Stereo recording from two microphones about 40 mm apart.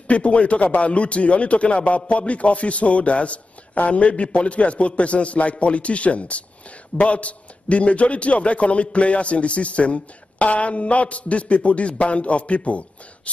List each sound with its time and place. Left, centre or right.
0.1 s a man's voice: left